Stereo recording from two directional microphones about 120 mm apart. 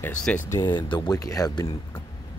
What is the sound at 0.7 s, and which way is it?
Speech, 40° left (ahead or behind).